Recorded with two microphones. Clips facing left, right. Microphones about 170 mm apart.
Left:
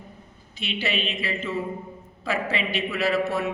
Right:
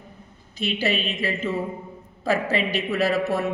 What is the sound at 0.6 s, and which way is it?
A woman's voice, 40° right (ahead or behind).